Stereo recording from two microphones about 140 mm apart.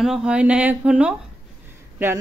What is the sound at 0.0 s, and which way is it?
Speech, 5° right (ahead or behind).